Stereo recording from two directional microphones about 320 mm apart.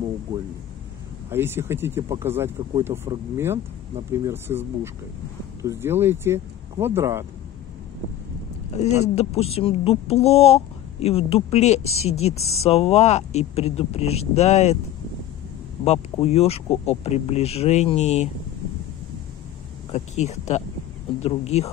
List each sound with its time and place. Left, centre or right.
1.3 s speech: centre
9.0 s speech: centre
15.8 s speech: centre
19.9 s speech: left